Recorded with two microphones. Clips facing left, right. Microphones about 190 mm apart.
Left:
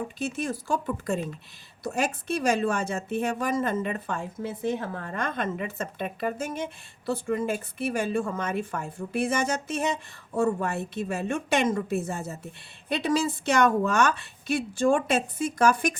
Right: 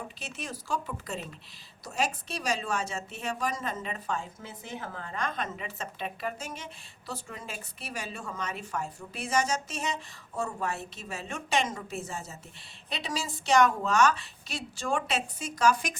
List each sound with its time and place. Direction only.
0.2 s speech: 50° left (ahead or behind)